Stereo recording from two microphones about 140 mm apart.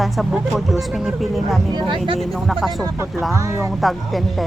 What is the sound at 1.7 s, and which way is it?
Speech, 35° right (ahead or behind).